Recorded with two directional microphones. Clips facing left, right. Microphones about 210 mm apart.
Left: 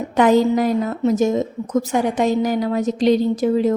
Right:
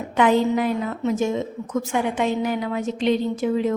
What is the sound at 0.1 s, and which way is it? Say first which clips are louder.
Speech: left 4 dB; 40° left (ahead or behind).